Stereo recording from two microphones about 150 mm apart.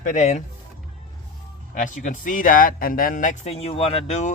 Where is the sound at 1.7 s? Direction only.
55° left (ahead or behind).